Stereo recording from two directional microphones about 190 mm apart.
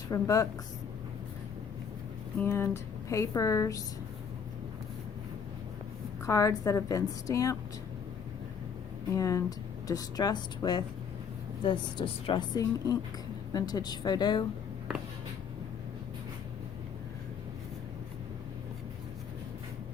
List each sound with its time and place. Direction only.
0.1 s speech: 15° left (ahead or behind)
2.4 s speech: 15° left (ahead or behind)
6.2 s speech: 15° left (ahead or behind)
9.1 s a woman's voice: 15° left (ahead or behind)